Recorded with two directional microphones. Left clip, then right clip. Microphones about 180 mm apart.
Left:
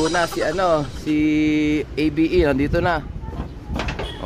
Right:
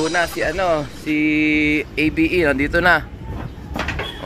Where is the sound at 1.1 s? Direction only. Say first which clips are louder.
Right 2 dB; 20° left (ahead or behind).